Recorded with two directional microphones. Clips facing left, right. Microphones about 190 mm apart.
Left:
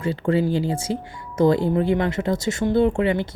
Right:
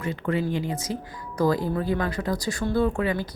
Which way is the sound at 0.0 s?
30° left (ahead or behind).